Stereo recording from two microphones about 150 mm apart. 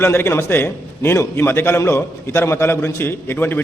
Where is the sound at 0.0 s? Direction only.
15° left (ahead or behind).